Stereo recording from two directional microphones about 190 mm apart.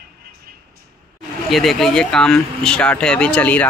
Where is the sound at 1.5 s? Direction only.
Centre (ahead or behind).